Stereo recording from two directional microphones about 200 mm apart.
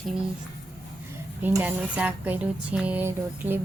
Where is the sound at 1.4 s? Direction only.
10° right (ahead or behind).